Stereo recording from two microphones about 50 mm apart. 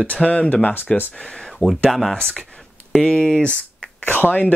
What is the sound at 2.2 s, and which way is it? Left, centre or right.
Speech, left.